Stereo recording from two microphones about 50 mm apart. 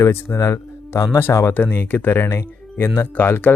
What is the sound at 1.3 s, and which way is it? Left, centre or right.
Speech, left.